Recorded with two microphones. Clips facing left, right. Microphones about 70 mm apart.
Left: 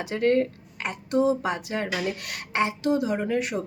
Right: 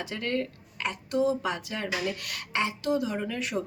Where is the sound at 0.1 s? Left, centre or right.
Left.